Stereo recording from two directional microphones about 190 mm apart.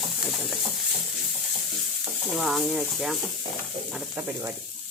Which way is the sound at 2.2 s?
Centre (ahead or behind).